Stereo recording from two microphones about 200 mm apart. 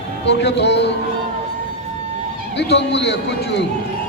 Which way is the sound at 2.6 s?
60° left (ahead or behind).